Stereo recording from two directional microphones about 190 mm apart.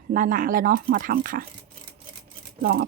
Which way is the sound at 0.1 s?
45° right (ahead or behind).